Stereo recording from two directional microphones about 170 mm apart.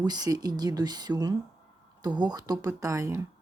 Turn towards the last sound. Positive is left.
turn(degrees=-15)  # may be behind; listen again after turning